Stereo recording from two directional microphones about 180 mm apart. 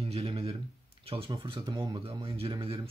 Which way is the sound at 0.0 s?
30° right (ahead or behind).